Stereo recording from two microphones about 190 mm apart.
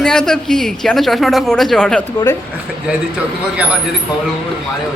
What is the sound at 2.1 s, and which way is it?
Speech, 20° left (ahead or behind).